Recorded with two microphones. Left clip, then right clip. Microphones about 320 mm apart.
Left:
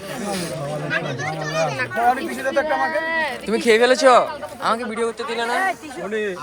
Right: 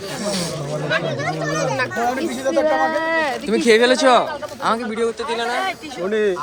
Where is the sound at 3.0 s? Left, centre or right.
Right.